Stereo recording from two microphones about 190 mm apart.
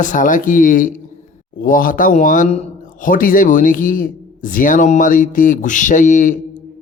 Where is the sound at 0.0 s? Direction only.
45° left (ahead or behind).